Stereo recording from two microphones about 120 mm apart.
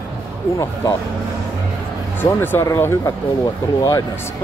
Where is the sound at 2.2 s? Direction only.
15° left (ahead or behind).